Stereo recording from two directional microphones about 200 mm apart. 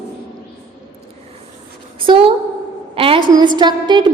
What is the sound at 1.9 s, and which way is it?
A woman's voice, 25° right (ahead or behind).